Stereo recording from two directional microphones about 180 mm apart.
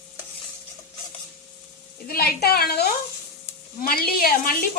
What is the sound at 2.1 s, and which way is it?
Speech, 60° left (ahead or behind).